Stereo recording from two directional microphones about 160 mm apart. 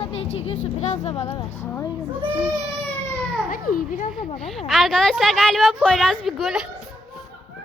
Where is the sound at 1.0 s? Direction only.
40° left (ahead or behind).